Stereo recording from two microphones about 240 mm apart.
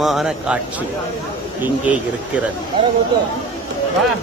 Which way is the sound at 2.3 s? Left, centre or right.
Centre.